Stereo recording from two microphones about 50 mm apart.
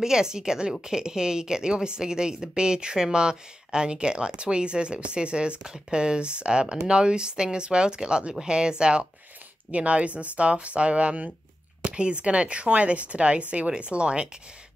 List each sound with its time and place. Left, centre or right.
0.0 s a woman's voice: centre